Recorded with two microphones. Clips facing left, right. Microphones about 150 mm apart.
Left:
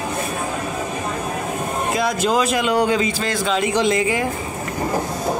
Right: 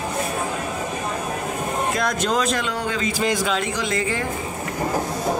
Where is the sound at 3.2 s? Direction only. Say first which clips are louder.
Right 1 dB; 15° right (ahead or behind).